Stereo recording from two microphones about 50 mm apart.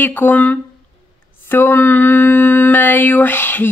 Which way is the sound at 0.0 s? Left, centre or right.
Left.